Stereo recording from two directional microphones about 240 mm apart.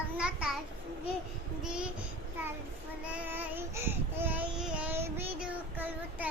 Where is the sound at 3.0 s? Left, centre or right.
Centre.